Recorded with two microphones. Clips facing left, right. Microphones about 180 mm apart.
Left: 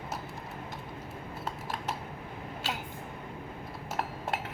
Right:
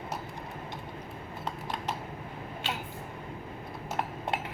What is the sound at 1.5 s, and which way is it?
Typing, 5° left (ahead or behind).